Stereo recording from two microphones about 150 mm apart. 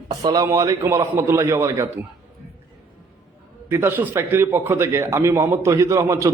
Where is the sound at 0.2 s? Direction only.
25° right (ahead or behind).